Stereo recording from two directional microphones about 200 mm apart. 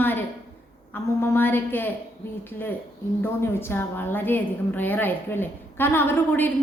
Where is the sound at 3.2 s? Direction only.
10° left (ahead or behind).